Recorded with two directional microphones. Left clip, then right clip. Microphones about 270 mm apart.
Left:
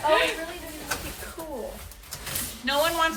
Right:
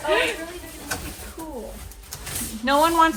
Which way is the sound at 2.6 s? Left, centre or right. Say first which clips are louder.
Right 6 dB; centre.